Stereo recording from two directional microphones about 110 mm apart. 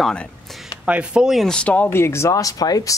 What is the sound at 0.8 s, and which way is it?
Speech, 10° right (ahead or behind).